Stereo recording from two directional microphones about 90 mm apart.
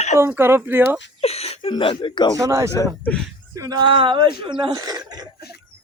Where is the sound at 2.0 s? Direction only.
60° left (ahead or behind).